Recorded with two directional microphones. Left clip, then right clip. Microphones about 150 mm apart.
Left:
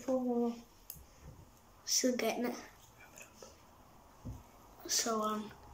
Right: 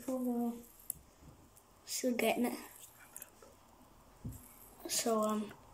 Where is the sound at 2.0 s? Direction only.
15° right (ahead or behind).